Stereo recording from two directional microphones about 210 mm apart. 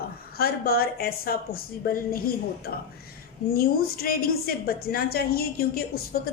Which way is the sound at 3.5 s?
45° left (ahead or behind).